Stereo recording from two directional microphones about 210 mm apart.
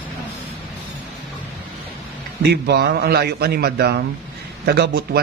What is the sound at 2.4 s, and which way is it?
A man's voice, 50° right (ahead or behind).